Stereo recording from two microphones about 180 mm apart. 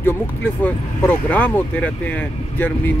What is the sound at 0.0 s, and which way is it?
Speech, 10° left (ahead or behind).